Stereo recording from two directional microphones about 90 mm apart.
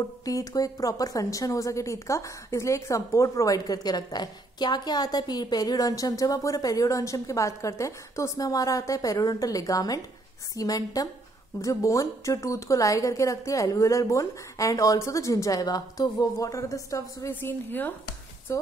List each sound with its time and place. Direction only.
0.2 s a woman's voice: 40° left (ahead or behind)
17.3 s a woman's voice: 20° left (ahead or behind)
18.5 s a woman's voice: 35° left (ahead or behind)